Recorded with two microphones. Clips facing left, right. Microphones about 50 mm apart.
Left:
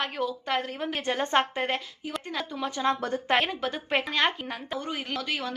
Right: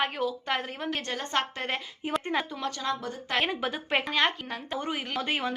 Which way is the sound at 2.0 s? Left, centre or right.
Right.